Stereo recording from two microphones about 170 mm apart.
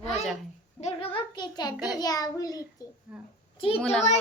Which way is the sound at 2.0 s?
20° left (ahead or behind).